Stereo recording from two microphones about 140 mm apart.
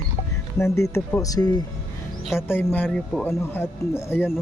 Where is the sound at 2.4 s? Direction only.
15° left (ahead or behind).